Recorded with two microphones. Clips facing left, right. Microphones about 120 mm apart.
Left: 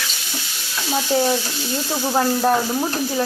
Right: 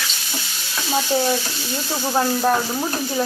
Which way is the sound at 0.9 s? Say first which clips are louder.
Left 1 dB; 5° left (ahead or behind).